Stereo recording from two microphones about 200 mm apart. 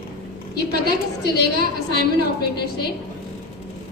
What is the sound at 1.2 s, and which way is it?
A woman's voice, 55° left (ahead or behind).